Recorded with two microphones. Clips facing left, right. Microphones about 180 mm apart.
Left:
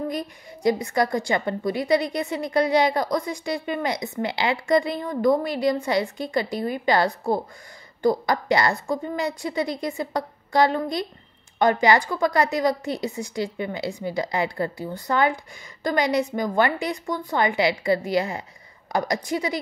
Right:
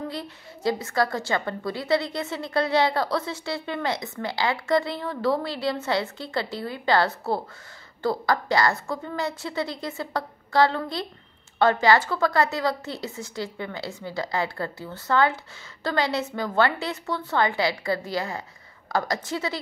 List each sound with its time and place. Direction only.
0.1 s a woman's voice: 15° left (ahead or behind)